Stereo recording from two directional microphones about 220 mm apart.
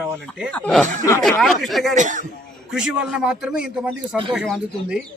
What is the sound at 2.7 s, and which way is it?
A man's voice, 5° right (ahead or behind).